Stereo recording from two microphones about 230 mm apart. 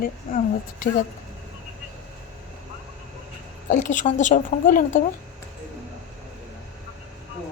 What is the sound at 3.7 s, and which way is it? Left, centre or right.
A woman's voice, left.